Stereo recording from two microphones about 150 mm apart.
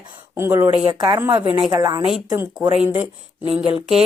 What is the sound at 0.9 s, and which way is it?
Speech, 30° right (ahead or behind).